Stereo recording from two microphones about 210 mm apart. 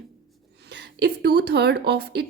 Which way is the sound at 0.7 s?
50° right (ahead or behind).